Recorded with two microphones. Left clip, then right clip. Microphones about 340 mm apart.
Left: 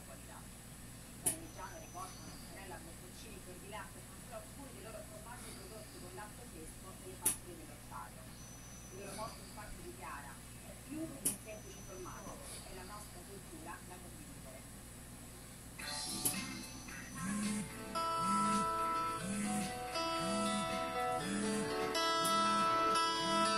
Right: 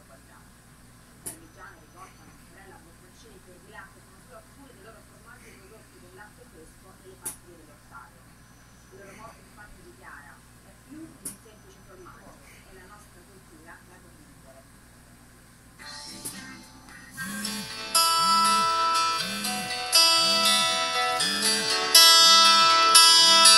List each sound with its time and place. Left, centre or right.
17.7 s music: right